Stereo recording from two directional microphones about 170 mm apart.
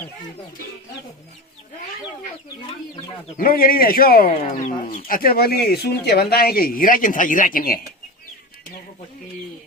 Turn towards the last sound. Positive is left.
turn(degrees=55)  # may be behind; listen again after turning